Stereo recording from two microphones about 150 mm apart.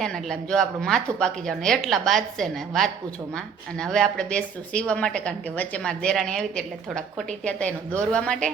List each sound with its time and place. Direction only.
0.0 s speech: 5° left (ahead or behind)